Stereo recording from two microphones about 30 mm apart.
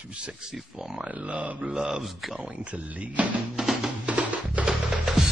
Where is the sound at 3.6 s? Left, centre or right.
Centre.